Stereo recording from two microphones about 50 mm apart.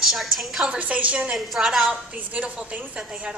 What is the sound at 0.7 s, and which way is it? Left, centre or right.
Speech, right.